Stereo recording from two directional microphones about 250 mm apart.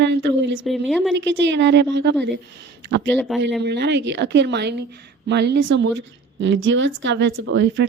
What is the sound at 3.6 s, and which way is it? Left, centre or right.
Speech, right.